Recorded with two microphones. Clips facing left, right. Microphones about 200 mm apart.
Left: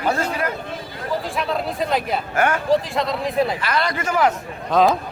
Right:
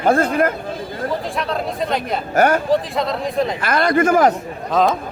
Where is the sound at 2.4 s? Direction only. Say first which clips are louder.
Right 6 dB; 40° right (ahead or behind).